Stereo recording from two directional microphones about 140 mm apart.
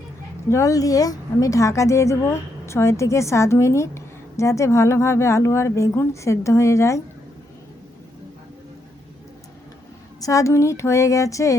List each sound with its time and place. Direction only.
0.5 s a woman's voice: 25° left (ahead or behind)
10.2 s a woman's voice: 25° left (ahead or behind)